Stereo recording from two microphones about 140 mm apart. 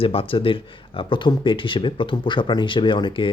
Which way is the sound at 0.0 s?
40° left (ahead or behind).